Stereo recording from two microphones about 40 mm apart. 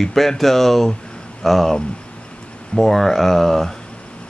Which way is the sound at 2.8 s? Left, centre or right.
Centre.